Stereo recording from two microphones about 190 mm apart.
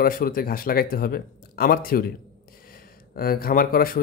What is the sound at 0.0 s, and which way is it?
Speech, 50° left (ahead or behind).